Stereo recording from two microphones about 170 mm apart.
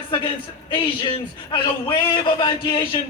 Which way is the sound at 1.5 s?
30° left (ahead or behind).